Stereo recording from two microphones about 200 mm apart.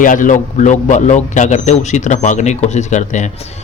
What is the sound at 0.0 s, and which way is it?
Speech, 40° left (ahead or behind).